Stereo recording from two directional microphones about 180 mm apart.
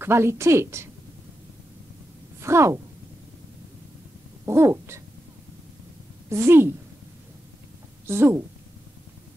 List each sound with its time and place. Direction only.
0.0 s a woman's voice: 15° right (ahead or behind)
2.4 s a woman's voice: 15° right (ahead or behind)
4.5 s a woman's voice: 15° right (ahead or behind)
6.2 s a woman's voice: 15° right (ahead or behind)
8.1 s a woman's voice: 15° right (ahead or behind)